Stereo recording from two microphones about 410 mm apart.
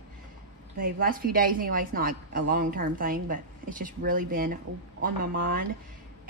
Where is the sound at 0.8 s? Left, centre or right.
Right.